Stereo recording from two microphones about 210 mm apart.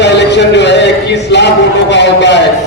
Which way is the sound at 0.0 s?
55° left (ahead or behind).